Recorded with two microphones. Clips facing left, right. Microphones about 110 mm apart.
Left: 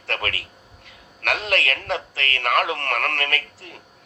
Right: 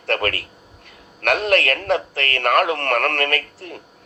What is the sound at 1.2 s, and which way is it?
A man's voice, 50° right (ahead or behind).